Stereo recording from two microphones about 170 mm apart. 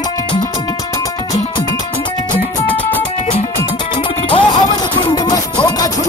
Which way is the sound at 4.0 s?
30° left (ahead or behind).